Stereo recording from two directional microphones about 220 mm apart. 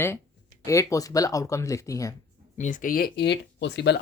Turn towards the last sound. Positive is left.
turn(degrees=50)  # may be behind; listen again after turning